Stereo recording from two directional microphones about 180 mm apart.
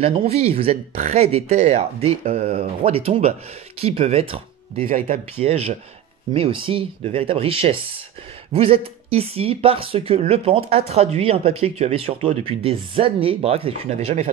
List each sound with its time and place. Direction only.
0.0 s speech: 35° right (ahead or behind)
4.8 s speech: 50° right (ahead or behind)